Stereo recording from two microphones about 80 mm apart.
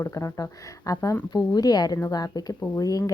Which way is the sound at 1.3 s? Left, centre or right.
Left.